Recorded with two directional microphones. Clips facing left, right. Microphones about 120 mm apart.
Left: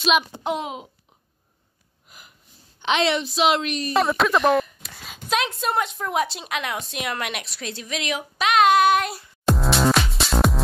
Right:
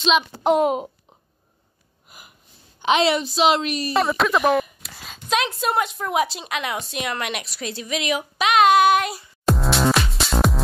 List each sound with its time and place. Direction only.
0.4 s speech: 50° right (ahead or behind)
2.0 s sniff: 10° right (ahead or behind)
2.8 s a woman's voice: 5° right (ahead or behind)